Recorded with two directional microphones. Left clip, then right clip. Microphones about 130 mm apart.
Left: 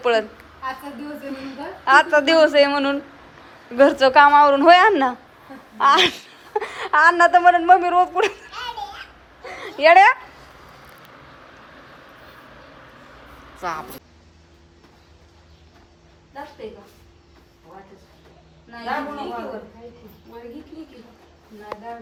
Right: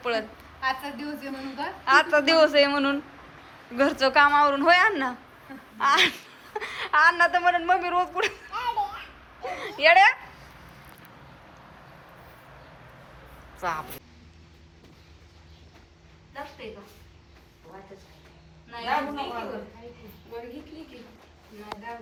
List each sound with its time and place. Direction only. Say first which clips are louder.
0.0 s a woman's voice: left 9 dB; 10° left (ahead or behind)
1.4 s a woman's voice: left 1 dB; 10° left (ahead or behind)
9.7 s speech: left 6 dB; 20° left (ahead or behind)
13.6 s a woman's voice: left 2 dB; 10° left (ahead or behind)